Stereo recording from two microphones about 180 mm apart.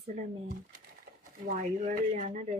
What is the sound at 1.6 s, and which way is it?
Speech, 45° right (ahead or behind).